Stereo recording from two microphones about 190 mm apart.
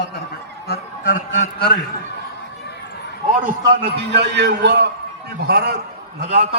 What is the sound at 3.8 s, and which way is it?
A man's voice, 60° right (ahead or behind).